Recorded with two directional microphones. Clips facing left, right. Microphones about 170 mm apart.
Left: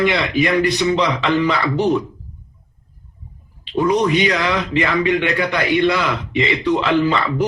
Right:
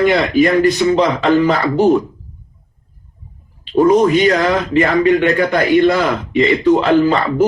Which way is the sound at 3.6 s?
45° right (ahead or behind).